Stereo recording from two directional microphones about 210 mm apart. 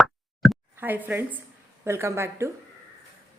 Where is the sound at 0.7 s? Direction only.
10° right (ahead or behind).